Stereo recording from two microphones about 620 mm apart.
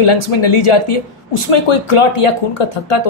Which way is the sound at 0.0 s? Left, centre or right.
Left.